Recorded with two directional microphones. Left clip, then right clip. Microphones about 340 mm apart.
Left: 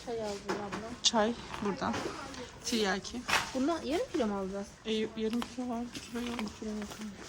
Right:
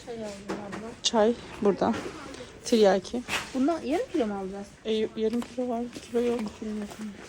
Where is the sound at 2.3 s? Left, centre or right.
Centre.